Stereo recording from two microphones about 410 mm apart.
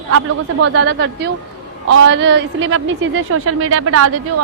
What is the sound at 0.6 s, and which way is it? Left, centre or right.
A woman's voice, right.